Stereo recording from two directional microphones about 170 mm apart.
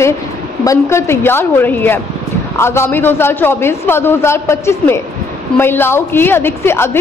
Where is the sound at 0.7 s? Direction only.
15° left (ahead or behind).